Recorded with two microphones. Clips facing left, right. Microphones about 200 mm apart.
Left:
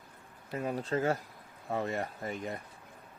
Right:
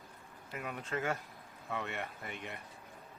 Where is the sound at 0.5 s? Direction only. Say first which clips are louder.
Left 7 dB; 35° left (ahead or behind).